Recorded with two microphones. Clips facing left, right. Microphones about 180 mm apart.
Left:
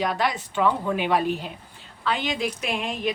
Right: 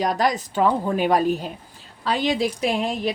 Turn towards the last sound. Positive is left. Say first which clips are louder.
# right 5 dB
turn(degrees=-35)  # may be behind; listen again after turning